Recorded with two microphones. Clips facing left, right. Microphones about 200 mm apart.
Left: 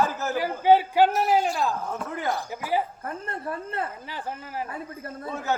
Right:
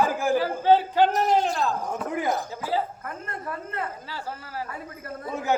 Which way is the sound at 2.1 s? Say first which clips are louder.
Right 3 dB; 20° right (ahead or behind).